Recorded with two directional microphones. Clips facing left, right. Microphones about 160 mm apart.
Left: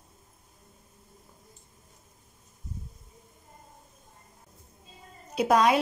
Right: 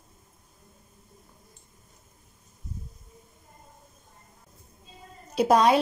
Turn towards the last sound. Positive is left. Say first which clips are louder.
# right 2 dB
turn(degrees=-30)  # may be behind; listen again after turning